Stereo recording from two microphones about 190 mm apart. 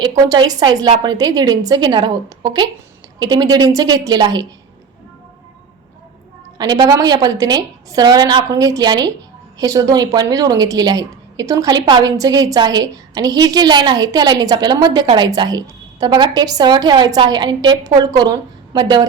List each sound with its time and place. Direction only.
0.3 s a woman's voice: 20° right (ahead or behind)
6.6 s a woman's voice: 20° right (ahead or behind)